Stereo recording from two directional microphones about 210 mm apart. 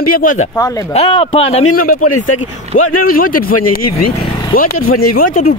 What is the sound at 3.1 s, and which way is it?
Speech, 45° left (ahead or behind).